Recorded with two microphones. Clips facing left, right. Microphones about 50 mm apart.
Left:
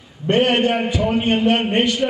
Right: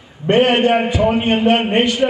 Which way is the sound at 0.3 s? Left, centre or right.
Right.